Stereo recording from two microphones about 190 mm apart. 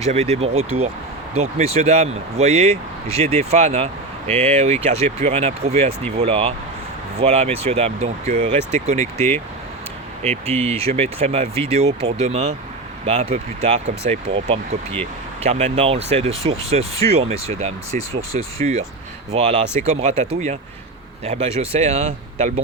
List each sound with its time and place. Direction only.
0.0 s speech: 35° right (ahead or behind)
10.2 s speech: 30° right (ahead or behind)
21.2 s speech: 35° right (ahead or behind)